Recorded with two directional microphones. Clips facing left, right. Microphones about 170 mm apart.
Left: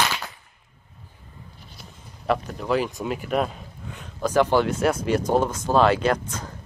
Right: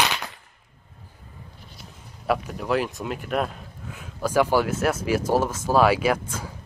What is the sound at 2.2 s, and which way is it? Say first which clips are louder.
Speech: left 1 dB; 5° right (ahead or behind).